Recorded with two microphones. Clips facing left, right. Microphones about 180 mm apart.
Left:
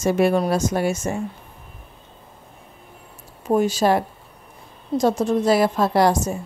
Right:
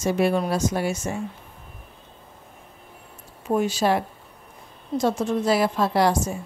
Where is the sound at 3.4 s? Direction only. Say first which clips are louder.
Left 3 dB; 40° left (ahead or behind).